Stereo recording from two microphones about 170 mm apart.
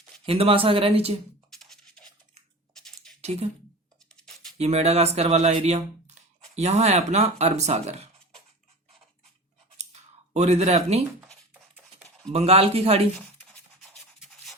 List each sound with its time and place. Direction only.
0.3 s speech: 35° right (ahead or behind)
3.2 s speech: 40° right (ahead or behind)
4.5 s speech: 40° right (ahead or behind)
9.7 s a sound: 40° right (ahead or behind)
12.3 s speech: 35° right (ahead or behind)